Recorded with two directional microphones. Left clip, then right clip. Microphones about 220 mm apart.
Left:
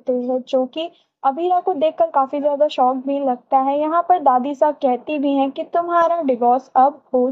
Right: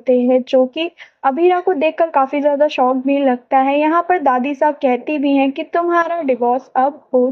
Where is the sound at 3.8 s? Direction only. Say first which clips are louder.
Right 1 dB; 45° right (ahead or behind).